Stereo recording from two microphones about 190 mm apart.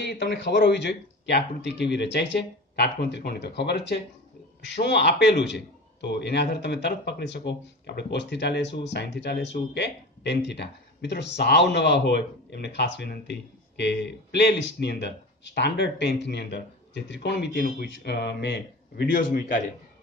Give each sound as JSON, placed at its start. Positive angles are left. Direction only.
{"t": 0.0, "sound": "a man's voice", "side_deg": 60}